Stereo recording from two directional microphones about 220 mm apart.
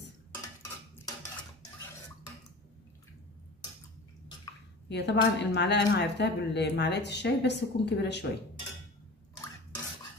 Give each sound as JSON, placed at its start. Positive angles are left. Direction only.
{"t": 4.8, "sound": "speech", "side_deg": 50}